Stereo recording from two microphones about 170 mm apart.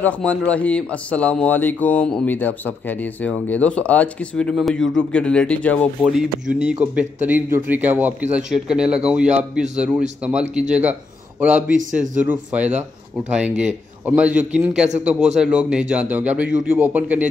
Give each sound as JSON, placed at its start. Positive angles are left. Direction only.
{"t": 0.0, "sound": "speech", "side_deg": 10}
{"t": 6.5, "sound": "a man's voice", "side_deg": -5}
{"t": 11.7, "sound": "a man's voice", "side_deg": -50}
{"t": 12.2, "sound": "a man's voice", "side_deg": -10}
{"t": 14.0, "sound": "a man's voice", "side_deg": -10}